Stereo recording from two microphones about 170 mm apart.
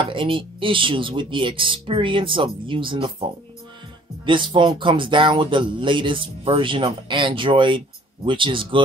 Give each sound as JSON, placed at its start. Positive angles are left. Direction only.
{"t": 0.0, "sound": "speech", "side_deg": -30}
{"t": 4.3, "sound": "speech", "side_deg": -30}